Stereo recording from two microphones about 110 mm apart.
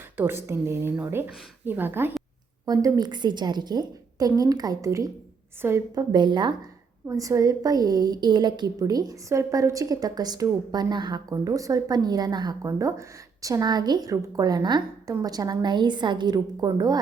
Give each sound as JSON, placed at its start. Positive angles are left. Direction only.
{"t": 0.2, "sound": "a woman's voice", "side_deg": -20}
{"t": 2.6, "sound": "a woman's voice", "side_deg": -35}
{"t": 7.1, "sound": "a woman's voice", "side_deg": -30}